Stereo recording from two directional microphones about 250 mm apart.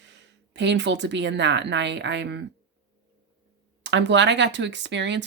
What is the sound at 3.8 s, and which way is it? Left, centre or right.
Speech, right.